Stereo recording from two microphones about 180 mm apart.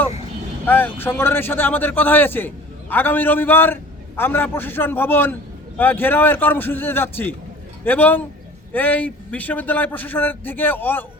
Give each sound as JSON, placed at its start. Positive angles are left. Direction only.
{"t": 0.6, "sound": "a man's voice", "side_deg": 10}